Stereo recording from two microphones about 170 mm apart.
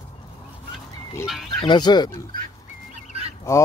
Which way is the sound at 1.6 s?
25° left (ahead or behind).